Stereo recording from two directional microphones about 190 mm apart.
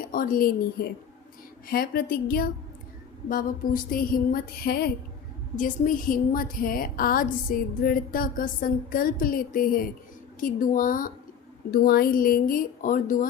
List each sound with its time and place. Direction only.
0.0 s a woman's voice: 45° left (ahead or behind)